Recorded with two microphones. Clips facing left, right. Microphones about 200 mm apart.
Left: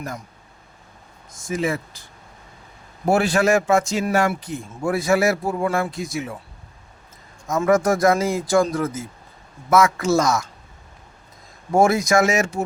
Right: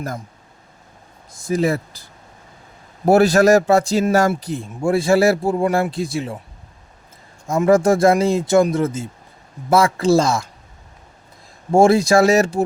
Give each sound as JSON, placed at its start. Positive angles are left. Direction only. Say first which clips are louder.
{"t": 1.3, "sound": "a man's voice", "louder": "right 5 dB", "side_deg": -35}
{"t": 3.1, "sound": "a man's voice", "louder": "right 6 dB", "side_deg": -40}
{"t": 7.7, "sound": "a man's voice", "louder": "right 4 dB", "side_deg": -25}
{"t": 11.7, "sound": "a man's voice", "louder": "right 4 dB", "side_deg": -30}